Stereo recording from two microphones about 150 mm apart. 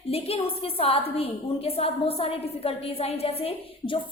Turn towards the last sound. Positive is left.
turn(degrees=40)  # may be behind; listen again after turning